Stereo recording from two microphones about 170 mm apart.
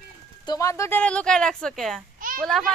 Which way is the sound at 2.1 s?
55° right (ahead or behind).